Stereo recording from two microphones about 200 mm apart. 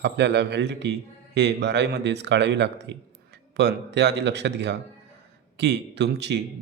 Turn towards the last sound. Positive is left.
turn(degrees=-60)  # may be behind; listen again after turning